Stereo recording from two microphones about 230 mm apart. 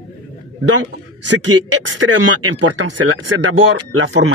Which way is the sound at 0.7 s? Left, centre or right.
Right.